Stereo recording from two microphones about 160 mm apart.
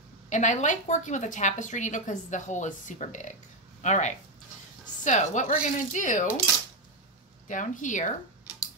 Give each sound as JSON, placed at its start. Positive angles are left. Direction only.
{"t": 0.3, "sound": "a woman's voice", "side_deg": 50}
{"t": 7.4, "sound": "a woman's voice", "side_deg": 55}